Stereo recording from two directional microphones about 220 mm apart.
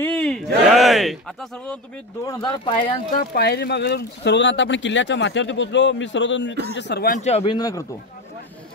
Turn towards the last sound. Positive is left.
turn(degrees=15)  # may be behind; listen again after turning